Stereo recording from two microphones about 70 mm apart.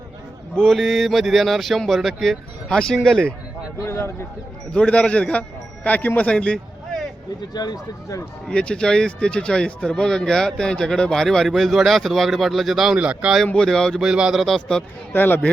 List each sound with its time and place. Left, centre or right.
0.5 s speech: centre
3.8 s speech: left
4.7 s a man's voice: centre
7.5 s speech: left
8.4 s speech: centre
13.0 s speech: centre
13.7 s speech: centre
14.0 s speech: centre
14.4 s speech: centre
15.1 s speech: left